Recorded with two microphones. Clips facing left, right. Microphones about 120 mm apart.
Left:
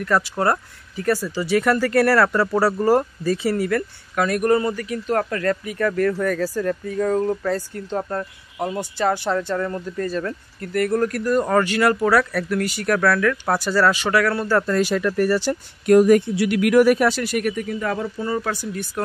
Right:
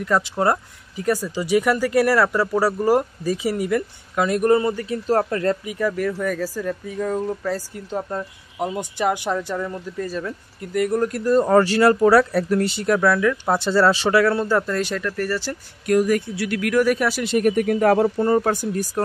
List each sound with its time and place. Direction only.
0.0 s speech: 20° right (ahead or behind)
5.8 s speech: 10° right (ahead or behind); by 14.6 s 25° right (ahead or behind)
14.7 s speech: 5° left (ahead or behind)
15.0 s speech: 15° left (ahead or behind)
17.6 s speech: 65° right (ahead or behind)
18.0 s speech: 50° right (ahead or behind)